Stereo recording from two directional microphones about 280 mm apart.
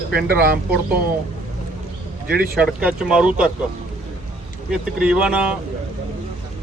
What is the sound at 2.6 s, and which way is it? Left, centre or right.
Speech, centre.